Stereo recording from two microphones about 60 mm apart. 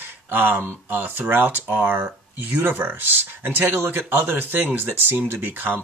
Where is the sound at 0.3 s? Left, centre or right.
Right.